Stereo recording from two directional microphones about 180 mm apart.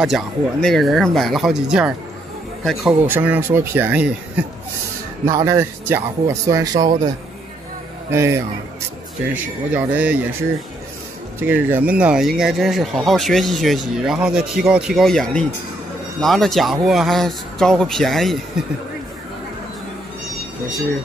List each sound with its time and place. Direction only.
0.0 s speech: centre (ahead or behind); by 7.1 s 20° right (ahead or behind)
8.1 s speech: 15° right (ahead or behind)
11.4 s speech: 10° right (ahead or behind)